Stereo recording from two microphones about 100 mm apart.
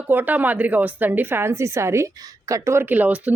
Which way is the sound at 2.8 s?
15° right (ahead or behind).